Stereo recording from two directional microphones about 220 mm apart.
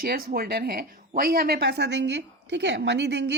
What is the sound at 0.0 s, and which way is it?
Speech, 40° right (ahead or behind).